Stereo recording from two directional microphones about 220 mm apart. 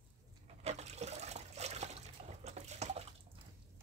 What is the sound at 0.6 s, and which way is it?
Water, 30° right (ahead or behind).